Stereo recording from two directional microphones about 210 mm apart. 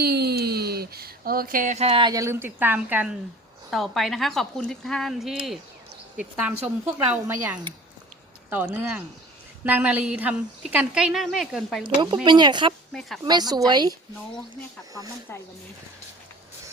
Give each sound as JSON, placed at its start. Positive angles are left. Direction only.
{"t": 0.0, "sound": "a woman's voice", "side_deg": -50}
{"t": 8.4, "sound": "a woman's voice", "side_deg": -10}
{"t": 12.2, "sound": "speech", "side_deg": -20}
{"t": 12.9, "sound": "speech", "side_deg": 0}
{"t": 13.2, "sound": "speech", "side_deg": -20}